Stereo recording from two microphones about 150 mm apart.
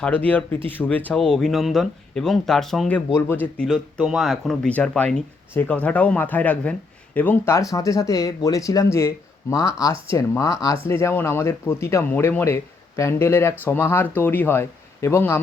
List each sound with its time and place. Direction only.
0.0 s speech: 10° left (ahead or behind)